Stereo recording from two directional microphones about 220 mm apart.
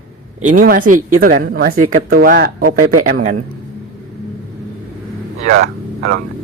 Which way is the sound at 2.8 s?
85° right.